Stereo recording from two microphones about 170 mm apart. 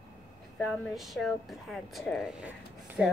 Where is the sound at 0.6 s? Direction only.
Centre (ahead or behind).